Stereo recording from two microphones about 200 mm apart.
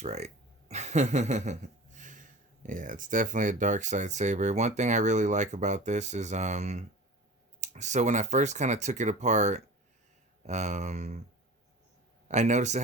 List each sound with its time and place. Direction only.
0.0 s speech: 35° right (ahead or behind)
0.7 s a sound: 35° right (ahead or behind)
2.6 s speech: 40° right (ahead or behind)
12.3 s speech: 35° right (ahead or behind)